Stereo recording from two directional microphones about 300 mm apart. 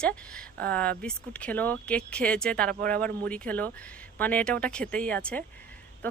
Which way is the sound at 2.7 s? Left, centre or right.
Right.